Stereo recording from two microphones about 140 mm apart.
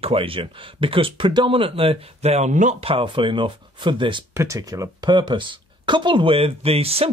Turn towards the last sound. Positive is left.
turn(degrees=-45)  # may be behind; listen again after turning